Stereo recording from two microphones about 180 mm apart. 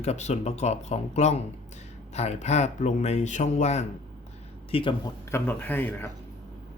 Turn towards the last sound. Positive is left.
turn(degrees=10)  # may be behind; listen again after turning